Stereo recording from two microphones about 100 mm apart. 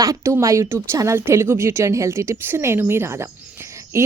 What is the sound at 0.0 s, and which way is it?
Speech, 30° right (ahead or behind).